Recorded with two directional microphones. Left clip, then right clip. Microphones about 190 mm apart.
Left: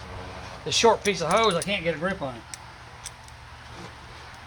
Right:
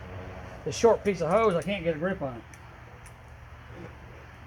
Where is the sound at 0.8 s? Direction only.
25° left (ahead or behind).